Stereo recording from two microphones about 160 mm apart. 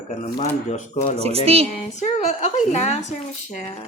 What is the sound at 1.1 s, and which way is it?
Speech, 40° right (ahead or behind).